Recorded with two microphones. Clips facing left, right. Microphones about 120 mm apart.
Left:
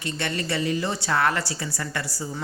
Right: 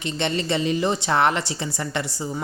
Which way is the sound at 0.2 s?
20° right (ahead or behind).